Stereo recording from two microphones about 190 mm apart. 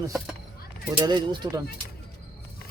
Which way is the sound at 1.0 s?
20° right (ahead or behind).